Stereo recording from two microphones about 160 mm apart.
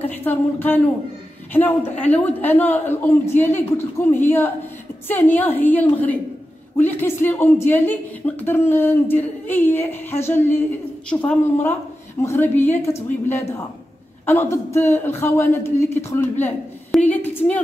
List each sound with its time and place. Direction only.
0.1 s speech: 10° left (ahead or behind)
14.2 s a woman's voice: 15° left (ahead or behind)